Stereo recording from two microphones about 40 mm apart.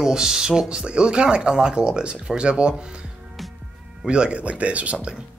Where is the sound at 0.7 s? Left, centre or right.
Right.